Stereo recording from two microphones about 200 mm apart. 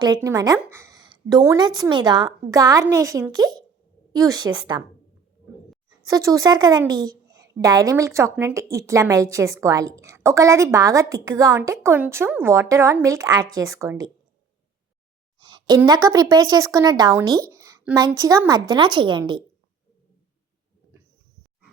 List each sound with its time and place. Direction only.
0.0 s a woman's voice: 20° right (ahead or behind)
6.1 s a woman's voice: 15° right (ahead or behind)
15.4 s a sound: 20° right (ahead or behind)
15.9 s a woman's voice: 15° right (ahead or behind)
17.5 s a sound: 15° right (ahead or behind)
18.2 s a woman's voice: 15° right (ahead or behind)